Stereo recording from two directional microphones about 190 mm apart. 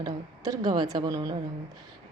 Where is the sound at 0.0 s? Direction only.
20° right (ahead or behind).